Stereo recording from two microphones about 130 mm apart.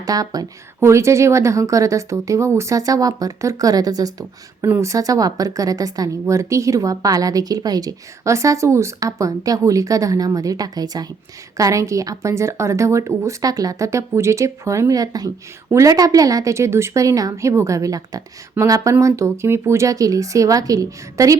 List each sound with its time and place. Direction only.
0.0 s speech: 30° right (ahead or behind)